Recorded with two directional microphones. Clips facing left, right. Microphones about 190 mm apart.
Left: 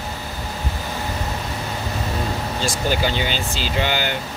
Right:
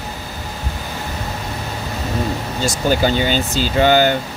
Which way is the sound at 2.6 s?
45° right (ahead or behind).